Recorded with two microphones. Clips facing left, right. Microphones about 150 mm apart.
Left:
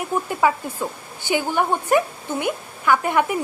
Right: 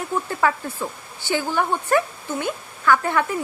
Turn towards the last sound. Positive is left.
turn(degrees=15)  # may be behind; listen again after turning